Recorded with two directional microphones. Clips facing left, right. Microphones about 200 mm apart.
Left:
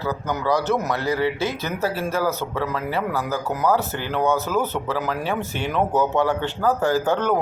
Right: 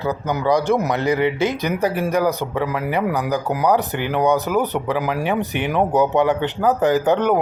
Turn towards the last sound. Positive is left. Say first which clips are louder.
# right 4 dB
turn(degrees=-20)  # may be behind; listen again after turning